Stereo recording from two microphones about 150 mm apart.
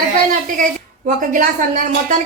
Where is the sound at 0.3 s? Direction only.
60° right (ahead or behind).